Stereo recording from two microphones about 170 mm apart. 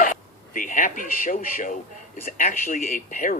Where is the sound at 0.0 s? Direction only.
50° left (ahead or behind).